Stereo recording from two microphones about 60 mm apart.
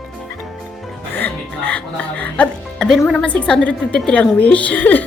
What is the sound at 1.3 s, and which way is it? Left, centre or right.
Speech, left.